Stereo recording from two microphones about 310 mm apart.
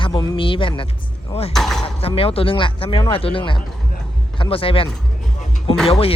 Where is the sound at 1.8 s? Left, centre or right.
Centre.